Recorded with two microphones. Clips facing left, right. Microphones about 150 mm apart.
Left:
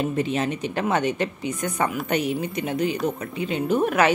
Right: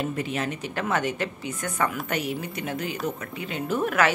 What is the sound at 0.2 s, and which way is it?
A woman's voice, 25° left (ahead or behind).